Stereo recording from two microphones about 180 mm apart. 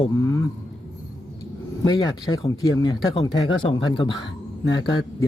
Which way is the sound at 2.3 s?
25° left (ahead or behind).